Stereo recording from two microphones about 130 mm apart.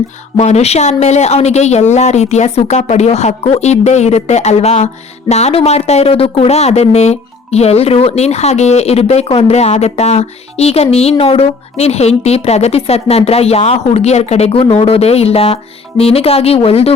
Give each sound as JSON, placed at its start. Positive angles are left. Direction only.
{"t": 0.3, "sound": "speech", "side_deg": 60}